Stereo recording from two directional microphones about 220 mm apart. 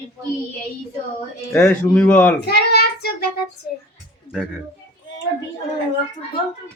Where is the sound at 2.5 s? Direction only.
45° left (ahead or behind).